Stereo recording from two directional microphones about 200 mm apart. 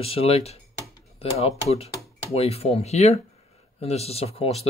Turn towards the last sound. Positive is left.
turn(degrees=30)  # may be behind; listen again after turning